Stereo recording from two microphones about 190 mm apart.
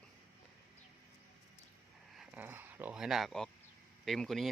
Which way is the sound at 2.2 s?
10° right (ahead or behind).